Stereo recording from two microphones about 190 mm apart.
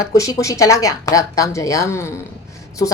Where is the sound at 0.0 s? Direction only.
15° left (ahead or behind).